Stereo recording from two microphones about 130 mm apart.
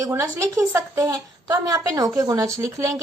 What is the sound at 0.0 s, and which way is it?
A woman's voice, 20° right (ahead or behind).